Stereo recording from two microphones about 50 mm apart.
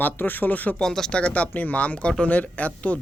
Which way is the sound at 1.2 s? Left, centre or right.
Left.